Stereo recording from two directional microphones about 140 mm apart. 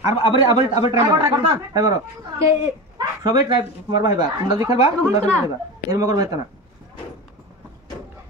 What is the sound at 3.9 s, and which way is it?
Speech, 30° right (ahead or behind).